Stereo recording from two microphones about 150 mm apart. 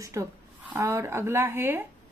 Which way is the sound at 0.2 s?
20° right (ahead or behind).